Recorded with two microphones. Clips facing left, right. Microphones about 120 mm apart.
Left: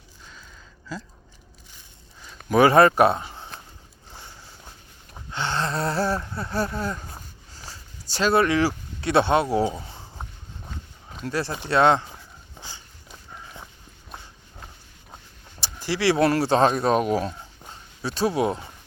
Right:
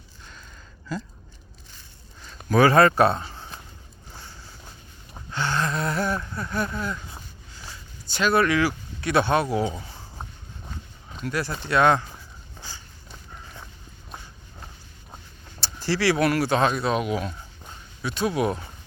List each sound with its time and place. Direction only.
2.2 s speech: 20° left (ahead or behind)
5.3 s gasp: 25° left (ahead or behind)
11.3 s speech: 30° left (ahead or behind)
15.6 s speech: 15° left (ahead or behind)